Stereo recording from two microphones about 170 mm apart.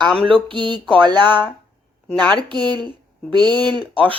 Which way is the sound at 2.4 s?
25° right (ahead or behind).